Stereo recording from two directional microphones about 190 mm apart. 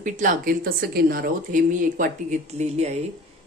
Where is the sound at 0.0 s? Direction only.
40° right (ahead or behind).